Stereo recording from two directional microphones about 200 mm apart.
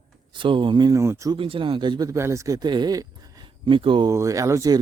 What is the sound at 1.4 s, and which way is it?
Speech, 25° right (ahead or behind).